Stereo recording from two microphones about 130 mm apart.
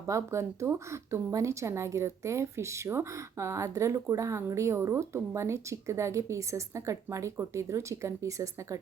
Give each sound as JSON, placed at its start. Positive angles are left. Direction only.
{"t": 0.1, "sound": "a woman's voice", "side_deg": -20}